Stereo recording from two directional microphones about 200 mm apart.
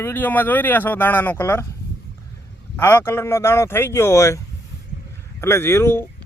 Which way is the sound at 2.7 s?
10° left (ahead or behind).